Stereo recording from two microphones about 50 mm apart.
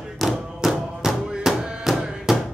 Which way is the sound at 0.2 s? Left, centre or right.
Centre.